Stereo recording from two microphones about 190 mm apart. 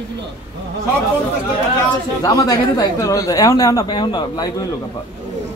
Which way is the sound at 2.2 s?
20° left (ahead or behind).